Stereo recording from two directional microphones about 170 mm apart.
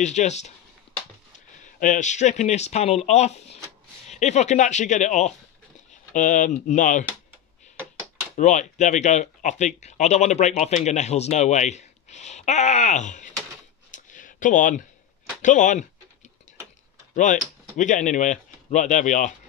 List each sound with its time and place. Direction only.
0.0 s speech: 45° left (ahead or behind)
1.6 s speech: 45° left (ahead or behind)
8.4 s speech: 45° left (ahead or behind)
13.9 s a sound: 50° left (ahead or behind)
15.4 s speech: 45° left (ahead or behind)
17.1 s speech: 45° left (ahead or behind)